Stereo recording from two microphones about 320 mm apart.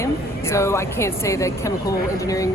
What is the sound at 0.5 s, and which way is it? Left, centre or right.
Speech, centre.